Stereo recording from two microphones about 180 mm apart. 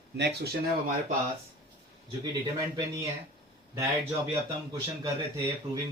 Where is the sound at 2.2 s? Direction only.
20° right (ahead or behind).